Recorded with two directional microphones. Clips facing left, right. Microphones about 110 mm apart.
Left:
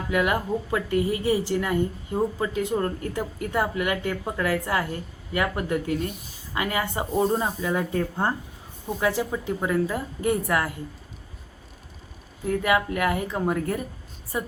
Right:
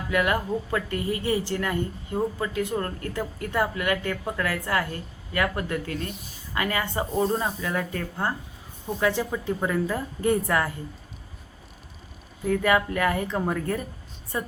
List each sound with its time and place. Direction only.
0.1 s a woman's voice: 20° left (ahead or behind)
9.0 s a woman's voice: 10° left (ahead or behind)
12.5 s a woman's voice: 5° left (ahead or behind)